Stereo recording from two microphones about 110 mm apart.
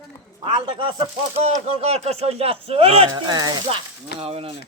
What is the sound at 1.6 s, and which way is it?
Speech, 70° right (ahead or behind).